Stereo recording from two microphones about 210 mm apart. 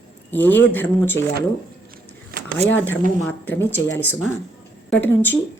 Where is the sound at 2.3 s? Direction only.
45° right (ahead or behind).